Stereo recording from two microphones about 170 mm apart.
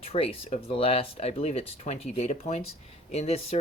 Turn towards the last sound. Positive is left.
turn(degrees=35)  # may be behind; listen again after turning